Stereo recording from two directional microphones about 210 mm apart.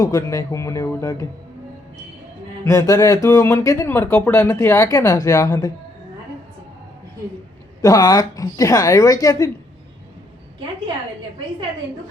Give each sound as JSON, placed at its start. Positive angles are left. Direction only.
{"t": 0.0, "sound": "speech", "side_deg": 15}
{"t": 2.6, "sound": "speech", "side_deg": 15}
{"t": 7.8, "sound": "speech", "side_deg": 20}